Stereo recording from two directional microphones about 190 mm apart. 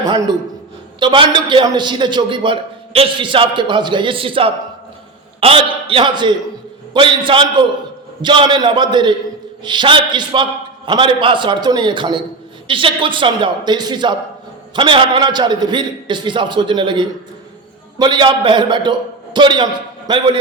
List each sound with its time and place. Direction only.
0.9 s a man's voice: 25° right (ahead or behind)